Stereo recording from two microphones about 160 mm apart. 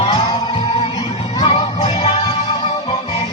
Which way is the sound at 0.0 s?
25° left (ahead or behind).